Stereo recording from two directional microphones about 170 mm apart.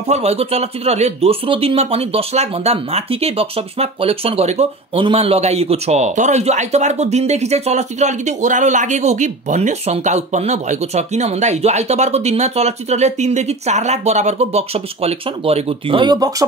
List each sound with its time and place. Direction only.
0.1 s speech: 40° right (ahead or behind)